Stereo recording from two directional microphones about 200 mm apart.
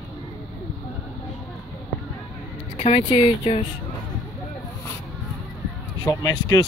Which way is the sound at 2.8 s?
30° left (ahead or behind).